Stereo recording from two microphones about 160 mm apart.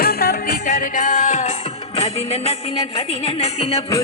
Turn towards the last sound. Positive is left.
turn(degrees=40)  # may be behind; listen again after turning